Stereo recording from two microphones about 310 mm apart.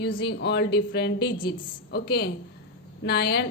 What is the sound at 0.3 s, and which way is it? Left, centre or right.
Speech, left.